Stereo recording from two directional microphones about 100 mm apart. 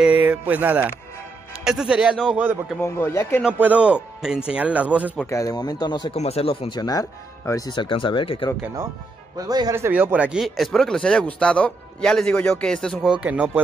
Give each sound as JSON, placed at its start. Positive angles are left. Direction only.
{"t": 0.0, "sound": "music", "side_deg": -15}
{"t": 1.5, "sound": "speech", "side_deg": -5}
{"t": 2.8, "sound": "speech", "side_deg": 25}
{"t": 3.5, "sound": "speech", "side_deg": -15}
{"t": 5.3, "sound": "speech", "side_deg": 35}
{"t": 6.1, "sound": "speech", "side_deg": 90}
{"t": 6.7, "sound": "speech", "side_deg": 40}
{"t": 7.7, "sound": "speech", "side_deg": 55}
{"t": 9.5, "sound": "a man's voice", "side_deg": -40}
{"t": 9.9, "sound": "speech", "side_deg": -15}
{"t": 10.4, "sound": "speech", "side_deg": 0}
{"t": 13.2, "sound": "speech", "side_deg": -15}